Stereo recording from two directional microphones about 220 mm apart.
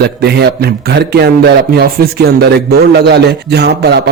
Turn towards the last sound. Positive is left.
turn(degrees=-50)  # may be behind; listen again after turning